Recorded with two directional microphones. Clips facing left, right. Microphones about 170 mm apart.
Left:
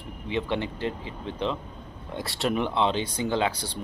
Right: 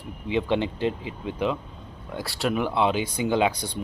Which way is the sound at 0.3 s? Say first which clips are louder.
Right 4 dB; 15° right (ahead or behind).